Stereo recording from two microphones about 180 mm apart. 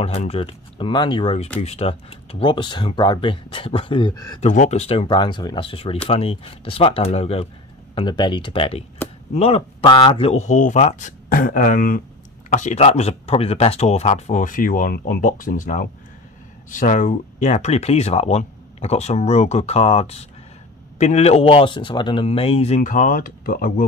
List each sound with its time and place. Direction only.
0.0 s speech: 35° left (ahead or behind); by 4.4 s 20° left (ahead or behind)
4.4 s speech: 40° left (ahead or behind)
22.8 s speech: 50° left (ahead or behind)